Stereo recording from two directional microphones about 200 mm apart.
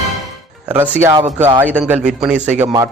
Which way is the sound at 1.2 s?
35° right (ahead or behind).